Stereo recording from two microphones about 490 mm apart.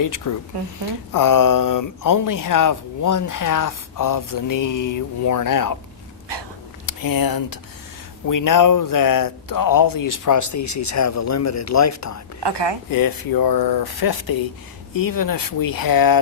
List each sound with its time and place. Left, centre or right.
0.0 s speech: left
0.5 s a woman's voice: right
1.1 s speech: left
6.3 s a sound: right
6.8 s speech: left
12.4 s a woman's voice: right
12.9 s speech: left